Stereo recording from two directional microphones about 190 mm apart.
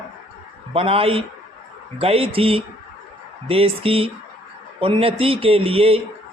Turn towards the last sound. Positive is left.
turn(degrees=-30)  # may be behind; listen again after turning